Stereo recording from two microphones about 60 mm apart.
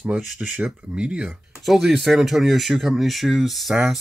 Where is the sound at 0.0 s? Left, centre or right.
Right.